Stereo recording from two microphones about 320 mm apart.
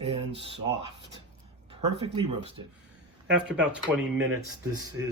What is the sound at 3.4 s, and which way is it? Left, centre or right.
Speech, centre.